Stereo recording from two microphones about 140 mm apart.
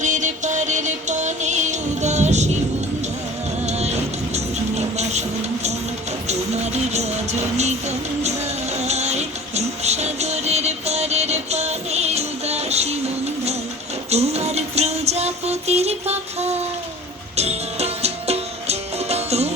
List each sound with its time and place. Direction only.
0.0 s music: 60° right (ahead or behind)
3.7 s music: 50° right (ahead or behind)
6.2 s music: 50° right (ahead or behind)
14.1 s music: 50° right (ahead or behind)